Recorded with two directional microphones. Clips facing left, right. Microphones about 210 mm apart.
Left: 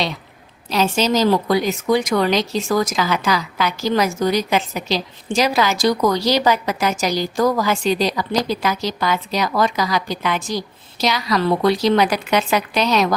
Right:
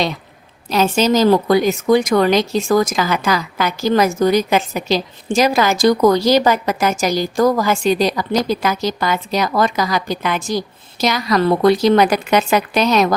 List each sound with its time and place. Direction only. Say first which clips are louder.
0.7 s a woman's voice: right 3 dB; 50° right (ahead or behind)